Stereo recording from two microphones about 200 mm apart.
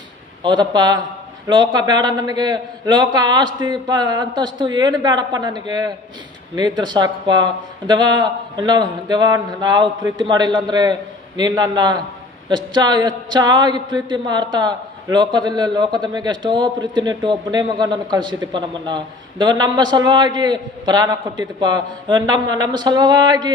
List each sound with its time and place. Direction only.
0.4 s a man's voice: 20° right (ahead or behind)